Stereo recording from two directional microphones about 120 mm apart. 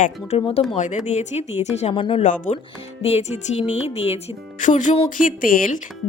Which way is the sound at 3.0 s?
60° left (ahead or behind).